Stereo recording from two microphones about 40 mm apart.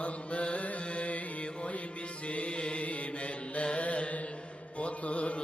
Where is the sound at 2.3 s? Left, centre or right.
Left.